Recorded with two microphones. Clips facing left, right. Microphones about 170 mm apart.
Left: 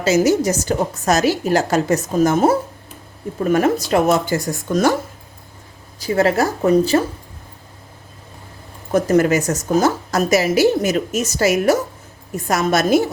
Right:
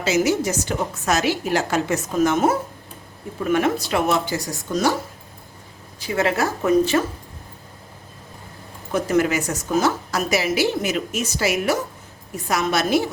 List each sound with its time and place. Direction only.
0.0 s a woman's voice: 40° left (ahead or behind)
6.0 s a woman's voice: 40° left (ahead or behind)
8.9 s a woman's voice: 40° left (ahead or behind)